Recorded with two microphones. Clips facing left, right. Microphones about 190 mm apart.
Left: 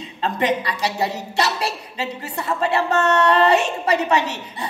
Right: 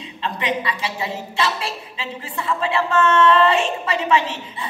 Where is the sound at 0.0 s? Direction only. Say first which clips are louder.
Left 4 dB; 45° left (ahead or behind).